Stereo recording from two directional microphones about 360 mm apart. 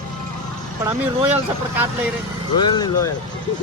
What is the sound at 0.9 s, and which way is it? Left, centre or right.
Speech, centre.